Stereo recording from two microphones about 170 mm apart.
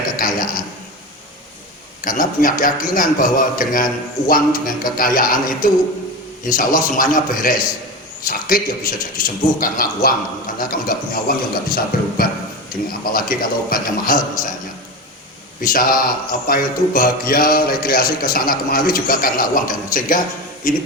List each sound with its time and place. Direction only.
0.2 s a sound: 55° left (ahead or behind)
2.0 s a man's voice: 55° left (ahead or behind)
4.3 s music: 55° left (ahead or behind)
6.4 s a man's voice: 55° left (ahead or behind)
8.3 s music: 55° left (ahead or behind)
15.6 s music: 55° left (ahead or behind)